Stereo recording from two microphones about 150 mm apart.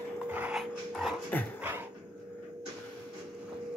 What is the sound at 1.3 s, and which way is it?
Dog, 10° left (ahead or behind).